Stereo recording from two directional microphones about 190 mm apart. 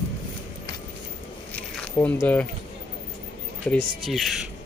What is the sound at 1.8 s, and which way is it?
Speech, 10° left (ahead or behind).